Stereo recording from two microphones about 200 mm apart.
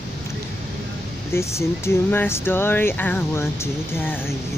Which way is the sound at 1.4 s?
15° left (ahead or behind).